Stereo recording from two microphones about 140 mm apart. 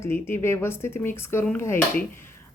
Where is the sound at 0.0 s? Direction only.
20° left (ahead or behind).